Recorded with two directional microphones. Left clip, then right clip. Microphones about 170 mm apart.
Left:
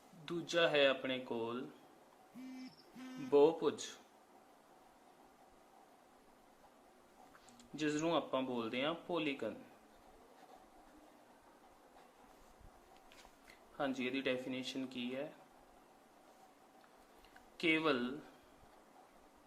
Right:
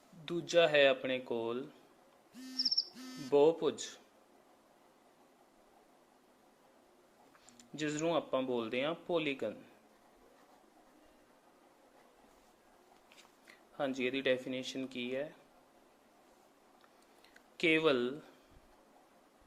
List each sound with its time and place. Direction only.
0.3 s speech: 30° right (ahead or behind)
3.2 s speech: 30° right (ahead or behind)
7.8 s speech: 30° right (ahead or behind)
13.7 s speech: 35° right (ahead or behind)
17.6 s speech: 35° right (ahead or behind)